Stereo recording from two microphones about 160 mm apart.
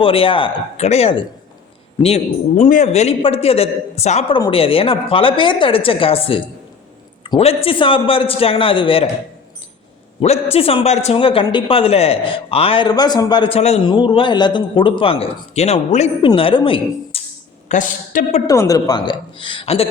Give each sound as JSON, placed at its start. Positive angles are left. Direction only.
{"t": 0.0, "sound": "a man's voice", "side_deg": 35}
{"t": 0.8, "sound": "a man's voice", "side_deg": 40}
{"t": 10.2, "sound": "a man's voice", "side_deg": 40}
{"t": 13.6, "sound": "a woman's voice", "side_deg": 40}
{"t": 13.8, "sound": "a man's voice", "side_deg": 30}
{"t": 17.7, "sound": "a woman's voice", "side_deg": 55}
{"t": 18.4, "sound": "a woman's voice", "side_deg": 20}